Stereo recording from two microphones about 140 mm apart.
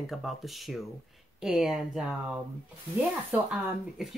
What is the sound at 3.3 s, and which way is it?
Speech, 5° right (ahead or behind).